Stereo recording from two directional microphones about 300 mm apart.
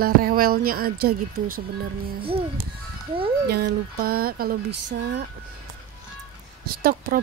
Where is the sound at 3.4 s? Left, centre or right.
Right.